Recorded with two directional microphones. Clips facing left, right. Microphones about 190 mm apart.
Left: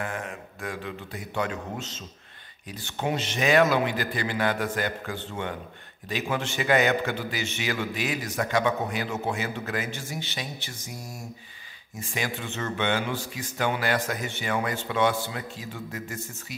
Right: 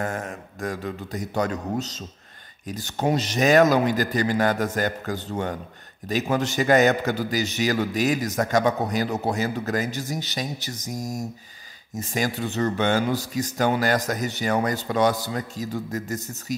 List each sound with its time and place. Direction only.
0.0 s a man's voice: 40° right (ahead or behind)